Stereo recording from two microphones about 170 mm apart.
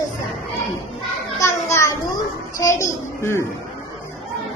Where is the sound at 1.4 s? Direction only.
15° left (ahead or behind).